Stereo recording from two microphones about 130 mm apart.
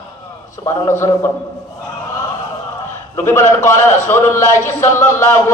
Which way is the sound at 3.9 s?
20° left (ahead or behind).